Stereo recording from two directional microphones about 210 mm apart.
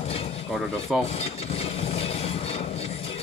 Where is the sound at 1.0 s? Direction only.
30° left (ahead or behind).